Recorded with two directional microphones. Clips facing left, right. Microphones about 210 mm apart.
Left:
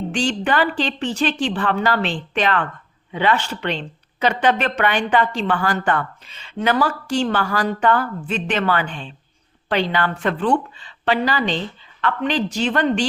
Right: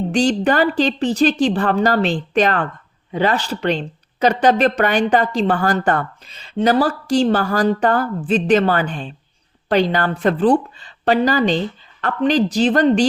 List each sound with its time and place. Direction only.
0.1 s a woman's voice: 40° right (ahead or behind)